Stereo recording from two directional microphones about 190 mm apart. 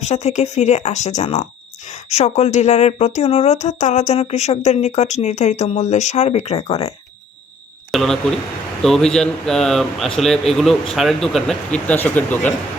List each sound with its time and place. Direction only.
0.0 s a woman's voice: 35° left (ahead or behind)
7.9 s speech: centre (ahead or behind)